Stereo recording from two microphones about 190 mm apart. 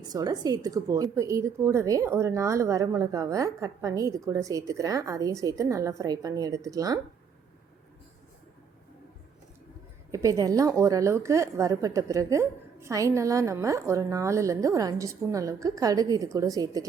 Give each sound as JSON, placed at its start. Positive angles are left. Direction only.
{"t": 0.0, "sound": "a woman's voice", "side_deg": -20}
{"t": 10.1, "sound": "a woman's voice", "side_deg": -15}